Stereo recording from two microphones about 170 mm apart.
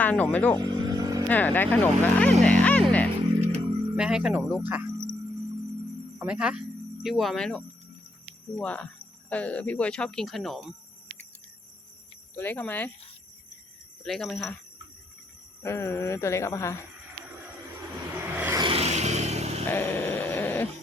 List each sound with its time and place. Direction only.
0.0 s speech: 10° left (ahead or behind)
0.6 s vehicle: 25° right (ahead or behind)
1.3 s speech: 10° left (ahead or behind)
2.4 s music: 5° left (ahead or behind)
3.9 s speech: 5° right (ahead or behind)
6.1 s speech: 5° right (ahead or behind)
12.4 s speech: 10° left (ahead or behind)
14.0 s speech: centre (ahead or behind)
15.6 s speech: 15° left (ahead or behind)
18.1 s vehicle: 10° right (ahead or behind)
18.5 s a sound: 30° right (ahead or behind)
19.6 s a sound: 10° left (ahead or behind)